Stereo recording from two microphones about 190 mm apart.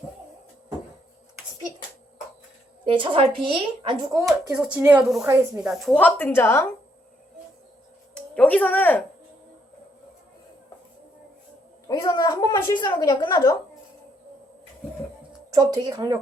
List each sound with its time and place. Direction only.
2.8 s a woman's voice: 25° right (ahead or behind)
4.5 s a woman's voice: 5° right (ahead or behind); by 6.7 s 10° left (ahead or behind)
8.1 s music: 5° left (ahead or behind)
11.9 s a sound: 20° left (ahead or behind)
15.4 s a woman's voice: 20° right (ahead or behind)